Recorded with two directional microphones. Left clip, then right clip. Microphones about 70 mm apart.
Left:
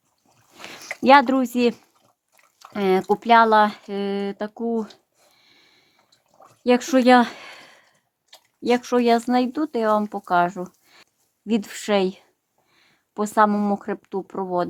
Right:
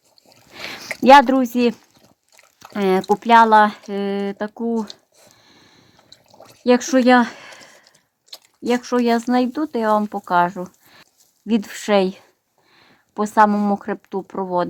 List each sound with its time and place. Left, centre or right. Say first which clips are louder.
1.0 s speech: right 4 dB; right
2.7 s speech: right 2 dB; right
5.3 s sniff: right 2 dB; right
6.7 s speech: right 3 dB; right
6.9 s a sound: left 2 dB; centre
9.1 s speech: right 1 dB; right
12.7 s speech: right 3 dB; right